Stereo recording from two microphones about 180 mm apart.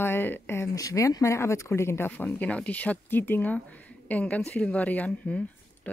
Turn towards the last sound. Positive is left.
turn(degrees=5)  # may be behind; listen again after turning